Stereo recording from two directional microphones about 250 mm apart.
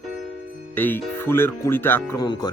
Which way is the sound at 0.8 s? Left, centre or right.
Centre.